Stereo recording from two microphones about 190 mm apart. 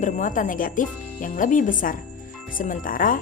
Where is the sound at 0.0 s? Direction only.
40° left (ahead or behind).